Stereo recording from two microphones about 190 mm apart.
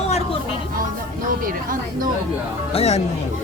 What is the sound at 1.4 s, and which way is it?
Speech, 45° right (ahead or behind).